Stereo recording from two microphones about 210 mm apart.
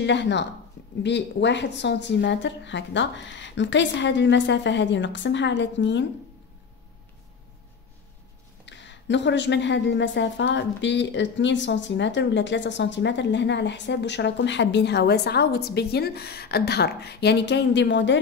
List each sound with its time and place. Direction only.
0.0 s a woman's voice: 55° left (ahead or behind)
8.6 s a woman's voice: 60° left (ahead or behind)